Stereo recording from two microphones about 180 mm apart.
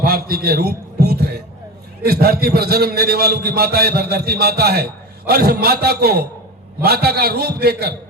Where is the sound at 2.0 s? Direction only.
60° right (ahead or behind).